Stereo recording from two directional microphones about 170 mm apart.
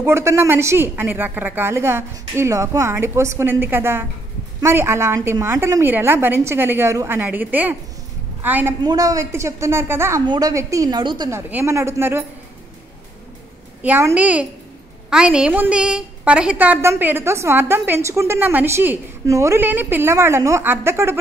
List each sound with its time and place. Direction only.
0.0 s a woman's voice: 15° right (ahead or behind)
8.8 s a woman's voice: 20° right (ahead or behind)
11.2 s a woman's voice: 15° right (ahead or behind)
13.8 s a woman's voice: 10° right (ahead or behind)